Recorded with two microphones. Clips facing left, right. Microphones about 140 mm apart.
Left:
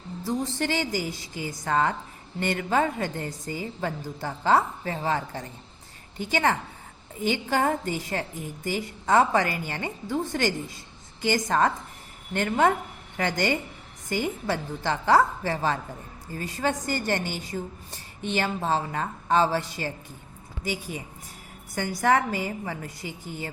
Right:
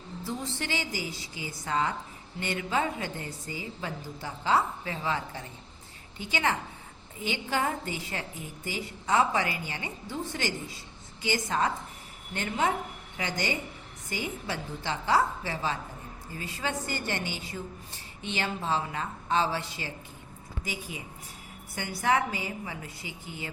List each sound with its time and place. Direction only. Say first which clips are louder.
0.3 s a woman's voice: left 7 dB; 45° left (ahead or behind)
21.8 s a woman's voice: left 4 dB; 45° left (ahead or behind)